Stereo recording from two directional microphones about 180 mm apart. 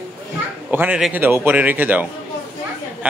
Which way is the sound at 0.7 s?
10° right (ahead or behind).